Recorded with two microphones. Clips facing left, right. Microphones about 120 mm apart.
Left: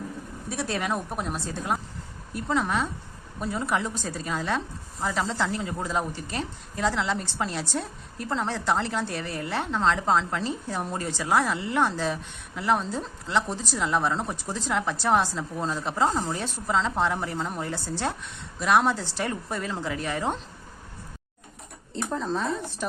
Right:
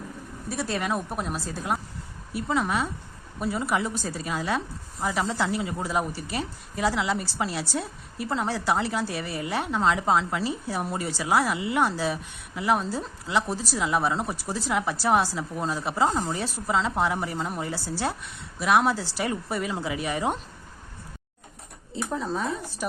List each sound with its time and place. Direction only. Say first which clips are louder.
0.4 s a woman's voice: right 1 dB; centre (ahead or behind)
21.9 s a woman's voice: even; 5° right (ahead or behind)